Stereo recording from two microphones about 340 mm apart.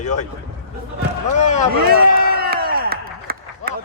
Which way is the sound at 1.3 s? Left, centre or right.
Left.